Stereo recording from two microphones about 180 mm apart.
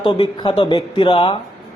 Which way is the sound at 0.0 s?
25° left (ahead or behind).